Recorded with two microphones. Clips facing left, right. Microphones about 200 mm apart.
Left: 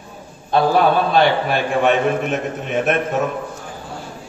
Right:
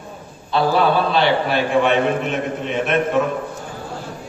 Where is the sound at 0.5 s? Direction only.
50° left (ahead or behind).